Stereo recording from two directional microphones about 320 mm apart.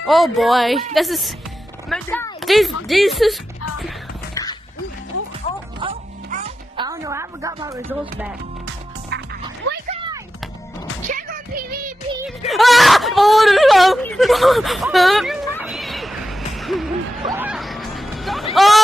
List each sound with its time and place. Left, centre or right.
0.0 s speech: centre
5.8 s music: centre
6.9 s a woman's voice: centre
11.1 s music: right
12.4 s whimper: centre